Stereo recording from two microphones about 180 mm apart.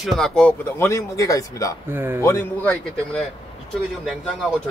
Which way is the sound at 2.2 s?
15° left (ahead or behind).